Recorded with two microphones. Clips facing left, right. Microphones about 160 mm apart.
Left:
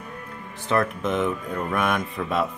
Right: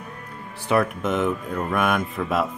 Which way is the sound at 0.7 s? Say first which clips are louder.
Right 2 dB; 5° right (ahead or behind).